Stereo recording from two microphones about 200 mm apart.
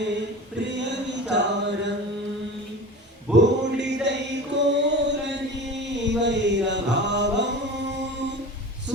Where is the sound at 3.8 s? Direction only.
60° right (ahead or behind).